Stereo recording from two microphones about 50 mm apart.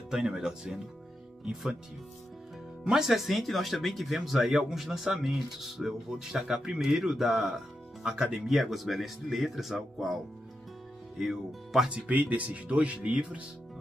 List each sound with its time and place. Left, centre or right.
0.1 s speech: centre
2.8 s speech: centre
8.5 s speech: centre
11.9 s speech: right